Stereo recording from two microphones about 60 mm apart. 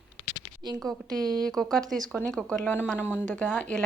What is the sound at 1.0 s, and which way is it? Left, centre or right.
Speech, right.